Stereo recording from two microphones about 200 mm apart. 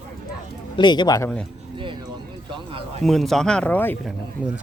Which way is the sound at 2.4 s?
25° right (ahead or behind).